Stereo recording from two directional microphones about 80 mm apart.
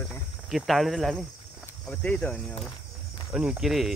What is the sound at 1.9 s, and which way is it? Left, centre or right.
Speech, centre.